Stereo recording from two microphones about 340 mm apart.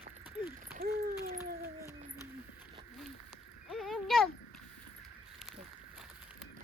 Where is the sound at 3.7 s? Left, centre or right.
Centre.